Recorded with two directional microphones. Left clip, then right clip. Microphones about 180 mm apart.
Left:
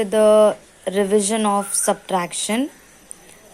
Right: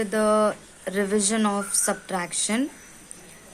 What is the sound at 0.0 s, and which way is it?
Speech, 20° left (ahead or behind).